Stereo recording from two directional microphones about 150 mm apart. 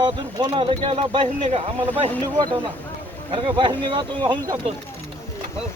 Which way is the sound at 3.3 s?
30° right (ahead or behind).